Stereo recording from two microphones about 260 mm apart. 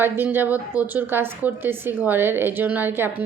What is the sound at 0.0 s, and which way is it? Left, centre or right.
A woman's voice, centre.